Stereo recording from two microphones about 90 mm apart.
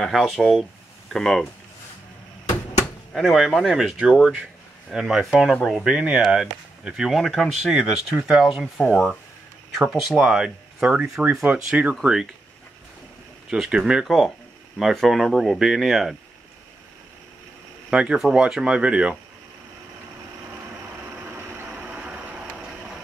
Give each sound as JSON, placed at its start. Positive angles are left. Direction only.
{"t": 0.0, "sound": "speech", "side_deg": 0}
{"t": 3.1, "sound": "speech", "side_deg": 0}
{"t": 5.9, "sound": "speech", "side_deg": -10}
{"t": 10.0, "sound": "speech", "side_deg": -5}
{"t": 13.5, "sound": "speech", "side_deg": -10}
{"t": 17.8, "sound": "speech", "side_deg": -10}
{"t": 21.2, "sound": "vehicle", "side_deg": -25}
{"t": 21.7, "sound": "vehicle", "side_deg": -15}